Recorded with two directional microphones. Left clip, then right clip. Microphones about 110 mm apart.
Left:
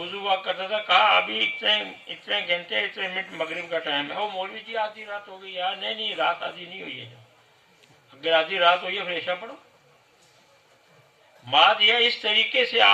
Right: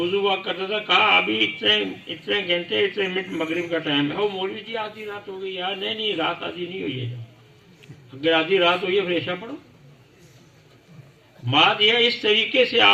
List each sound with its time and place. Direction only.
0.0 s speech: 50° left (ahead or behind)
8.2 s speech: 50° left (ahead or behind)
11.4 s speech: 50° left (ahead or behind)